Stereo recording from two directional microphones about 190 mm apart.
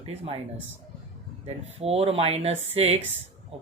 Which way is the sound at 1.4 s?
35° right (ahead or behind).